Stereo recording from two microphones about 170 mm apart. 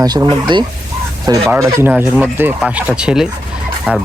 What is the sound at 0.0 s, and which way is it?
Speech, 20° right (ahead or behind).